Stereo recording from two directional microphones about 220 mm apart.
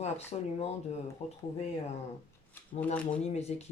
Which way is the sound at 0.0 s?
30° left (ahead or behind).